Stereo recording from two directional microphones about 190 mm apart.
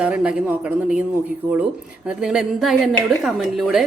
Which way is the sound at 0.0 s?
5° right (ahead or behind).